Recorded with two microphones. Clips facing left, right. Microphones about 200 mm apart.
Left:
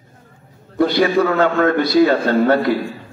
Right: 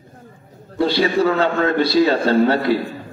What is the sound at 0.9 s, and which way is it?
A man's voice, 50° left (ahead or behind).